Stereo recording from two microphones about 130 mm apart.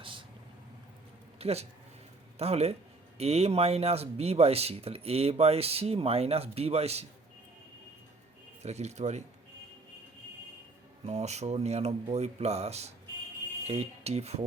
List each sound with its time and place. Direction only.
0.0 s vehicle: 40° right (ahead or behind)
1.4 s speech: 50° right (ahead or behind)
8.6 s speech: 60° right (ahead or behind)
11.0 s speech: 60° right (ahead or behind)